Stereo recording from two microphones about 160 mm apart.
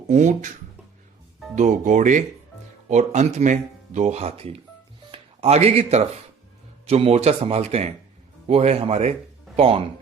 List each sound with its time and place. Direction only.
0.1 s speech: 50° right (ahead or behind)
1.5 s speech: 50° right (ahead or behind)